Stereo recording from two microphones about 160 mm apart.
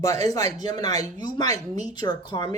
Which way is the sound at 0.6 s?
25° left (ahead or behind).